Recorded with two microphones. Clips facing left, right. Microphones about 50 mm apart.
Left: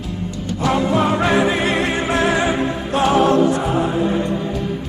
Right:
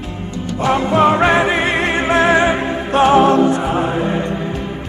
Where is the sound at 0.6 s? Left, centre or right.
Right.